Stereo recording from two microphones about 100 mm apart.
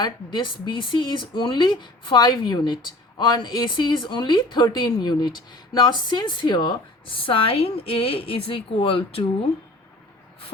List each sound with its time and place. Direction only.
0.0 s speech: 50° left (ahead or behind); by 9.5 s 70° left (ahead or behind)